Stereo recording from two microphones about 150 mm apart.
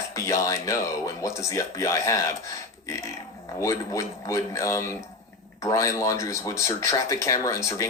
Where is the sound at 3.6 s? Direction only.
20° left (ahead or behind).